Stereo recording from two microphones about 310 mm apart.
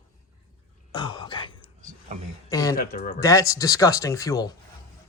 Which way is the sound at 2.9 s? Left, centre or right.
Left.